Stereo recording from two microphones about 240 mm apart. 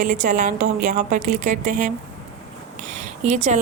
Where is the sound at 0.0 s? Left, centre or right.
Right.